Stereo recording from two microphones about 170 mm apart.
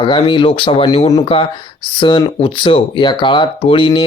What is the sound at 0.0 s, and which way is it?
Speech, 30° left (ahead or behind).